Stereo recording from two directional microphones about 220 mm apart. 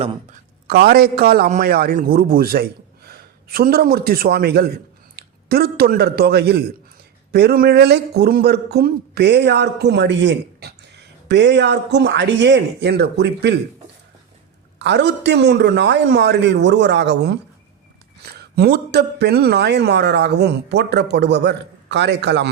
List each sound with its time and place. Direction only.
0.7 s a man's voice: 45° right (ahead or behind)
14.8 s speech: 50° right (ahead or behind)
18.3 s speech: 45° right (ahead or behind)